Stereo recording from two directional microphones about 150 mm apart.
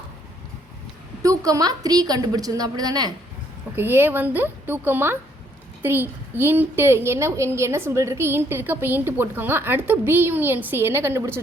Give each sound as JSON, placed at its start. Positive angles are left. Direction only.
{"t": 1.2, "sound": "a woman's voice", "side_deg": -20}
{"t": 3.8, "sound": "a child's voice", "side_deg": -15}